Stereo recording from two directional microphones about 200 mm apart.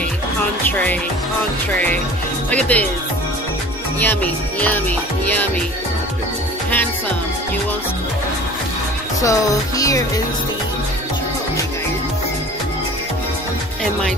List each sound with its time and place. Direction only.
0.7 s speech: 10° left (ahead or behind)
2.5 s speech: 5° left (ahead or behind)
4.0 s speech: 10° left (ahead or behind)
9.2 s speech: 15° left (ahead or behind)